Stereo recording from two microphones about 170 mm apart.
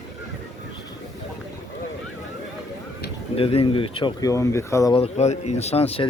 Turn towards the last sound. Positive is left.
turn(degrees=35)  # may be behind; listen again after turning